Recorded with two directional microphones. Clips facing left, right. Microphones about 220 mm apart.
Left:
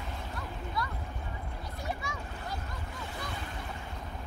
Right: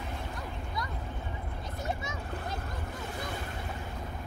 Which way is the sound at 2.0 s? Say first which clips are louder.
Right 1 dB; 20° right (ahead or behind).